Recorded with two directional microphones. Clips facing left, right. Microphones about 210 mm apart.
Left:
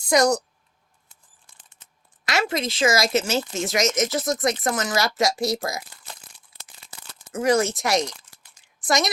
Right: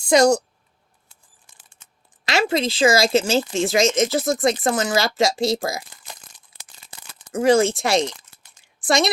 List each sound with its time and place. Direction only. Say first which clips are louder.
0.0 s speech: right 4 dB; 30° right (ahead or behind)
2.2 s speech: right 4 dB; 30° right (ahead or behind)
7.3 s a woman's voice: right 4 dB; 30° right (ahead or behind)